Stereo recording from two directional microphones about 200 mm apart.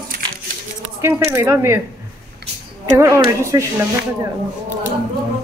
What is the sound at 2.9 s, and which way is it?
Speech, 15° right (ahead or behind).